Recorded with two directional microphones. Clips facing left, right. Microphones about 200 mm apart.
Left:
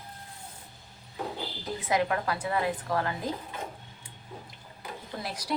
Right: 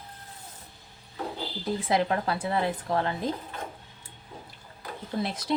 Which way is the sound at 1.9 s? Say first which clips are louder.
Right 1 dB; 30° right (ahead or behind).